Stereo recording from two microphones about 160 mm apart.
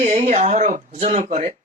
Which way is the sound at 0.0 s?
45° right (ahead or behind).